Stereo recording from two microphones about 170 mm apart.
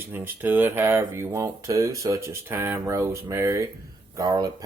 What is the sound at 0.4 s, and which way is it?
Speech, 10° right (ahead or behind).